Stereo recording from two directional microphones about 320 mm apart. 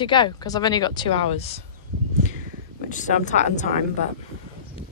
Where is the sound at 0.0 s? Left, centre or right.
Centre.